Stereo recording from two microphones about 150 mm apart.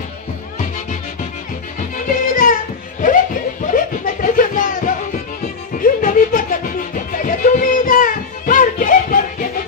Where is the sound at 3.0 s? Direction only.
60° left (ahead or behind).